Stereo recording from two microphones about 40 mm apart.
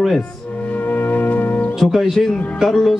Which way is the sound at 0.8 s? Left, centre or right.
Left.